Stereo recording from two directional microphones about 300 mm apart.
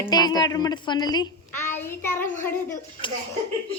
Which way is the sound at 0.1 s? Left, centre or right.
Centre.